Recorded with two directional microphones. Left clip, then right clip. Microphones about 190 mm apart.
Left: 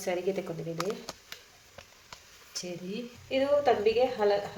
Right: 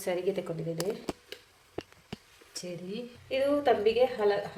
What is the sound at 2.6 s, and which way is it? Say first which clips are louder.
A woman's voice: left 1 dB; 5° right (ahead or behind).